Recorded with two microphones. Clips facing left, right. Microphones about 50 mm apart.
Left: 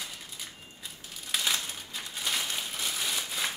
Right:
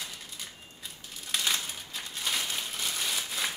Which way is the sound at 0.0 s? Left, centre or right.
Centre.